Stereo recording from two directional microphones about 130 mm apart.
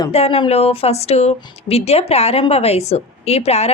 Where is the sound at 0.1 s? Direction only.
50° left (ahead or behind).